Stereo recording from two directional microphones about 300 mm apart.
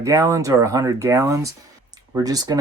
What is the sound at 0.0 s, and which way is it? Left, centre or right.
Speech, centre.